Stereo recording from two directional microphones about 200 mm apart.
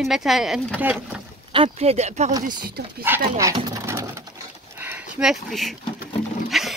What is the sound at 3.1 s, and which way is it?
Pigeon, 15° right (ahead or behind).